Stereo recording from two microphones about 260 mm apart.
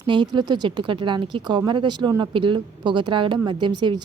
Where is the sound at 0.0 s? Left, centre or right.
Centre.